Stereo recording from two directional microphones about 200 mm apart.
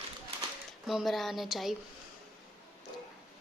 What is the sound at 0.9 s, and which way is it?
Speech, centre (ahead or behind).